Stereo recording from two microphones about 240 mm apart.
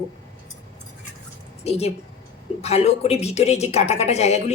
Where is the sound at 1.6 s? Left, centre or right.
Left.